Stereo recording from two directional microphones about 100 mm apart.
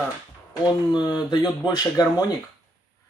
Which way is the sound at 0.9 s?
50° left (ahead or behind).